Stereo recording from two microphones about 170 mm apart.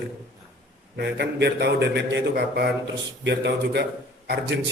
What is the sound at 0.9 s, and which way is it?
A man's voice, 90° right.